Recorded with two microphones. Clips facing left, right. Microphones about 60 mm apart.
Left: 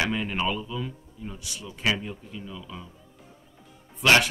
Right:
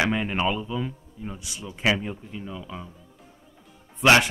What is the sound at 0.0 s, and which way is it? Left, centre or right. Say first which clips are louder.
Speech: right 3 dB; centre.